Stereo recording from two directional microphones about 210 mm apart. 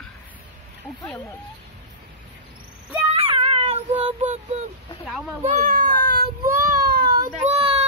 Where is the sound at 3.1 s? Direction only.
25° right (ahead or behind).